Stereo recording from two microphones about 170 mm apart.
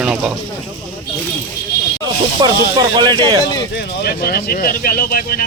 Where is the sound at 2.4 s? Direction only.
30° right (ahead or behind).